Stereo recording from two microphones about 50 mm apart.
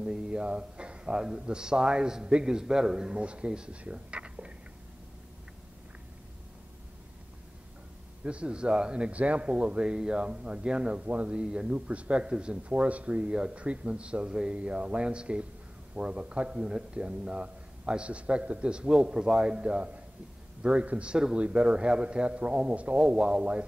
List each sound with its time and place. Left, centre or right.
0.0 s a sound: centre
0.4 s a man's voice: right
8.2 s a man's voice: right